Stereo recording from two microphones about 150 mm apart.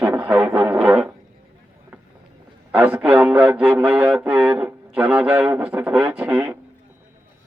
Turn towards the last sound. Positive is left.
turn(degrees=-10)  # may be behind; listen again after turning